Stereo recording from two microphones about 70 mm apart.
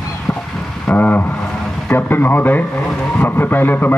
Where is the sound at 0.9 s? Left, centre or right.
Left.